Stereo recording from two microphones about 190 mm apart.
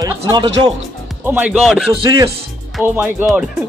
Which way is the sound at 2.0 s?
25° right (ahead or behind).